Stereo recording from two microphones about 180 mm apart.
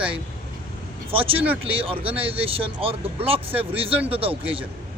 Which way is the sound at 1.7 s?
30° right (ahead or behind).